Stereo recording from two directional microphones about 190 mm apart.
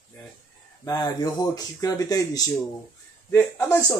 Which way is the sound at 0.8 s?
20° left (ahead or behind).